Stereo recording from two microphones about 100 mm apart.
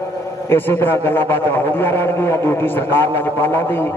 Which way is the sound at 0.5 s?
20° left (ahead or behind).